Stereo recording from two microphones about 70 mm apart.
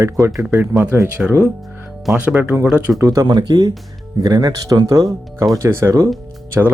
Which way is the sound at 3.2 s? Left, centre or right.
Right.